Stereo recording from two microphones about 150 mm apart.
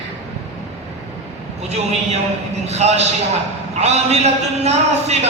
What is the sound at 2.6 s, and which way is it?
A man's voice, 45° right (ahead or behind).